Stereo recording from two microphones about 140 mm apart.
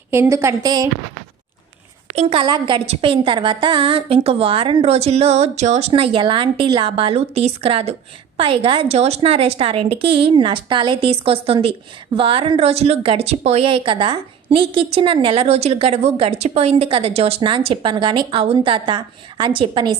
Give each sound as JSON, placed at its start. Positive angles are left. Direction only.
{"t": 0.1, "sound": "a woman's voice", "side_deg": -20}
{"t": 2.1, "sound": "a woman's voice", "side_deg": -40}
{"t": 5.9, "sound": "a woman's voice", "side_deg": -40}